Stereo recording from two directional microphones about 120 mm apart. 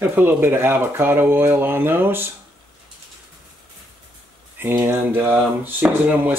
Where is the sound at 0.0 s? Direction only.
15° right (ahead or behind).